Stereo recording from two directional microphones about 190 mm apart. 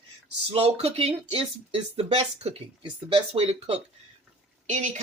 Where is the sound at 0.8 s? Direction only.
30° right (ahead or behind).